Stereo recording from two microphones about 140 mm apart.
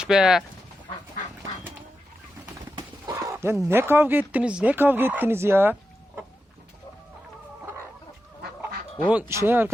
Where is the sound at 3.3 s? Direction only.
20° right (ahead or behind).